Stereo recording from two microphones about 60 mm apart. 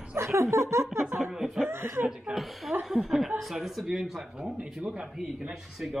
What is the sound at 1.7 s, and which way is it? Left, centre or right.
Speech, right.